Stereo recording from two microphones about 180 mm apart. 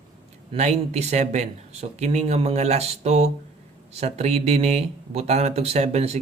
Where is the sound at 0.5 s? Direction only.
35° right (ahead or behind).